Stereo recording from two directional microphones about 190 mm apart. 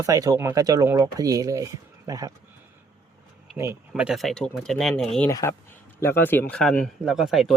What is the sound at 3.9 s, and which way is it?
Speech, centre (ahead or behind).